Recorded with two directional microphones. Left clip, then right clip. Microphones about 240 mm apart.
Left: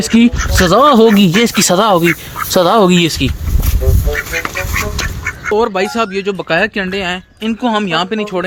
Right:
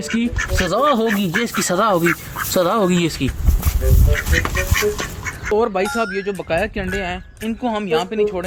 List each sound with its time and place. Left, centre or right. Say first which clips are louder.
0.0 s speech: left 9 dB; left
1.7 s speech: left 4 dB; centre
4.7 s duck: left 1 dB; centre
5.5 s speech: left 4 dB; centre; by 8.4 s left